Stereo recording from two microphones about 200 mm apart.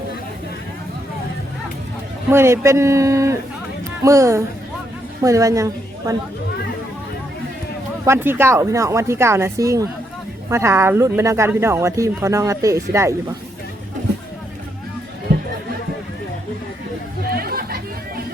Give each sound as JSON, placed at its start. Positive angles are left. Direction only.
{"t": 2.3, "sound": "a woman's voice", "side_deg": -15}
{"t": 8.0, "sound": "speech", "side_deg": -10}
{"t": 17.2, "sound": "chatter", "side_deg": -50}